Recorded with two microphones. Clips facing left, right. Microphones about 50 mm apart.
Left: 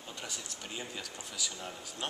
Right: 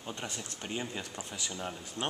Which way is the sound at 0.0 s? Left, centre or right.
Right.